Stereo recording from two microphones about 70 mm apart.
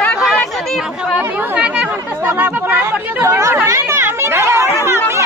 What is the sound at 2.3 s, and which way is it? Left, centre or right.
Chatter, right.